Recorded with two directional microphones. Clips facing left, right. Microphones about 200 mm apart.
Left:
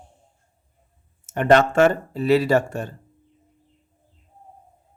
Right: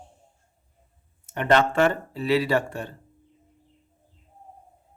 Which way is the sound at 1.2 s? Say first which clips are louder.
Left 4 dB; 45° left (ahead or behind).